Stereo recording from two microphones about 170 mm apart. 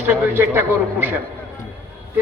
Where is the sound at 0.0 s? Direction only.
10° right (ahead or behind).